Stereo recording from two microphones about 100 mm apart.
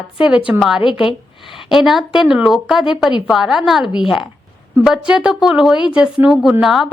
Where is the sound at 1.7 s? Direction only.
5° right (ahead or behind).